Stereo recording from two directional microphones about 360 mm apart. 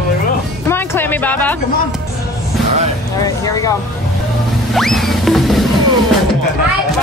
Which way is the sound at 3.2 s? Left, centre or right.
Centre.